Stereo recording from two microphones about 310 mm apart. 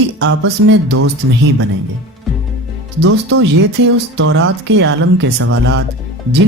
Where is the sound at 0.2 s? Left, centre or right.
Right.